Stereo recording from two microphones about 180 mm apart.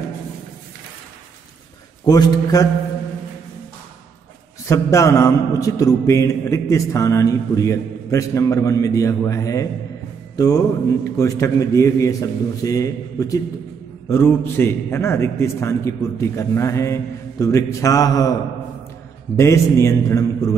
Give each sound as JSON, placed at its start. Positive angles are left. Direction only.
{"t": 2.0, "sound": "a man's voice", "side_deg": 20}
{"t": 4.6, "sound": "mantra", "side_deg": 15}
{"t": 10.3, "sound": "music", "side_deg": 20}
{"t": 11.1, "sound": "mantra", "side_deg": 15}
{"t": 19.3, "sound": "mantra", "side_deg": 15}